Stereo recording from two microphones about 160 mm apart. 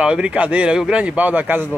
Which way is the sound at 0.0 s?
5° right (ahead or behind).